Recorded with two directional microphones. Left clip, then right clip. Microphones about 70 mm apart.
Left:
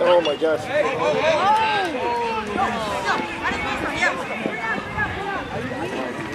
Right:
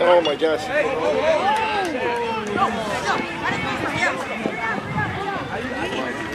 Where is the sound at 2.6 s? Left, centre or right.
Centre.